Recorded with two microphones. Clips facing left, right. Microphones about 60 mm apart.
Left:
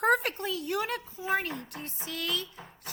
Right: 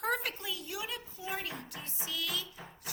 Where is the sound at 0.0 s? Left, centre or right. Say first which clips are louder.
Left 8 dB; left.